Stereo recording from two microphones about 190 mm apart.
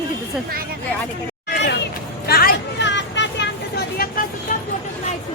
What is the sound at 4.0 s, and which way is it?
Vehicle, 50° left (ahead or behind).